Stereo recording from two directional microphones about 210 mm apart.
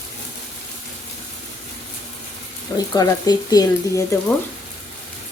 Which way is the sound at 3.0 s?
20° left (ahead or behind).